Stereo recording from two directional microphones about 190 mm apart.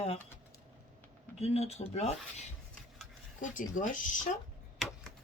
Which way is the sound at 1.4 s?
35° left (ahead or behind).